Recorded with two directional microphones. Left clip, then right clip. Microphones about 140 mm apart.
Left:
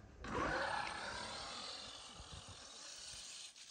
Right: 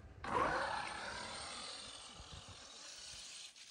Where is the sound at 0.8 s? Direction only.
Centre (ahead or behind).